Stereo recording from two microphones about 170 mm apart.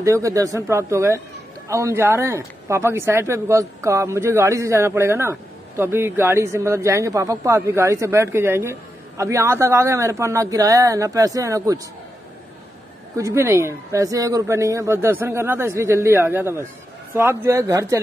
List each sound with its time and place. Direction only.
0.0 s speech: 15° right (ahead or behind)
13.1 s speech: 15° right (ahead or behind)